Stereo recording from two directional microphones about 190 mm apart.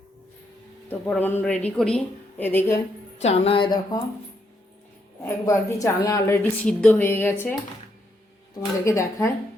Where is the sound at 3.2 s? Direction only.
35° left (ahead or behind).